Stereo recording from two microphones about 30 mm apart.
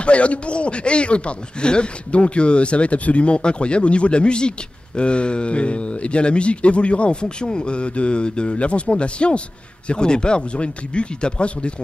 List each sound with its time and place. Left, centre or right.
0.0 s a man's voice: left